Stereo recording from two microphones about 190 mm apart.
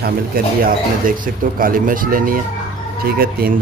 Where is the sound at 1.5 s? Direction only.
45° right (ahead or behind).